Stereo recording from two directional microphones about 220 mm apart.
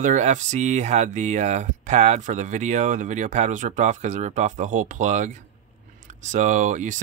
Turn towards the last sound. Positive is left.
turn(degrees=-35)  # may be behind; listen again after turning